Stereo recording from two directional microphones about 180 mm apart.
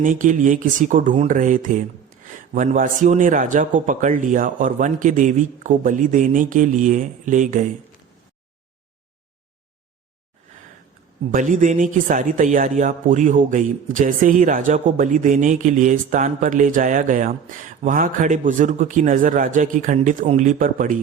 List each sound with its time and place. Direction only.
0.0 s speech: 45° right (ahead or behind)
11.3 s speech: 45° right (ahead or behind)